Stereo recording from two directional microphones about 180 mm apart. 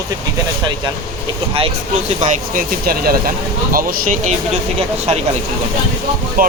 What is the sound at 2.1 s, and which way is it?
Speech, 45° right (ahead or behind).